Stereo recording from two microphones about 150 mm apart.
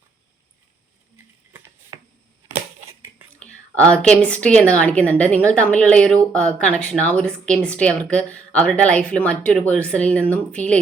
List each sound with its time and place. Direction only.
1.5 s a sound: 20° right (ahead or behind)
3.4 s whispering: 10° left (ahead or behind)
4.2 s speech: 5° left (ahead or behind)